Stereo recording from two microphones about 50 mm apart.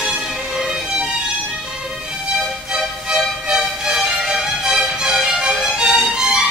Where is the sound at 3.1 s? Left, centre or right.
Centre.